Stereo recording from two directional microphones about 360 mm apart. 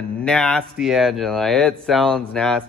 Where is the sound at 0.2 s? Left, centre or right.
Centre.